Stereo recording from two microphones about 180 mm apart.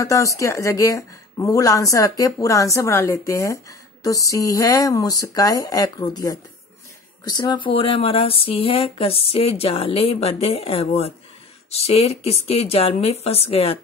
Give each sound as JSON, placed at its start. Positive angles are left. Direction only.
{"t": 0.0, "sound": "a woman's voice", "side_deg": 15}